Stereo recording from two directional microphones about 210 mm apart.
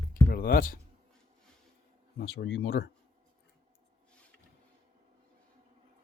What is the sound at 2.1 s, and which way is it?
Speech, 55° left (ahead or behind).